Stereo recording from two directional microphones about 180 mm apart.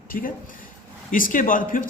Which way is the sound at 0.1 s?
50° left (ahead or behind).